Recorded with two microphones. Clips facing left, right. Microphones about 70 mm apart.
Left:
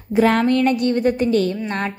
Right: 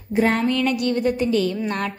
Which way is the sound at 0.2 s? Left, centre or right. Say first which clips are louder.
Left 4 dB; left.